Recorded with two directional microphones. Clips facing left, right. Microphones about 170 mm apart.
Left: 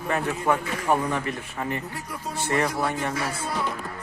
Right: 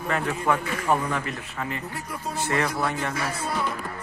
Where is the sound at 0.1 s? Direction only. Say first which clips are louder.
Left 1 dB; 15° left (ahead or behind).